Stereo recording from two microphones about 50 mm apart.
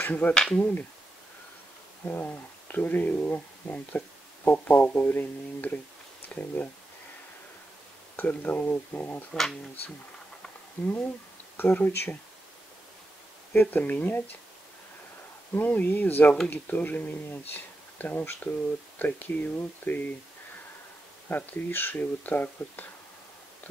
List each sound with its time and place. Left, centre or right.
0.0 s speech: left
2.0 s speech: left
8.2 s speech: left
11.5 s speech: left
13.5 s speech: left
15.5 s speech: left
21.3 s speech: left